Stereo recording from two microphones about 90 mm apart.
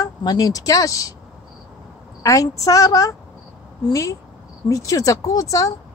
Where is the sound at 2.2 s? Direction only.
40° left (ahead or behind).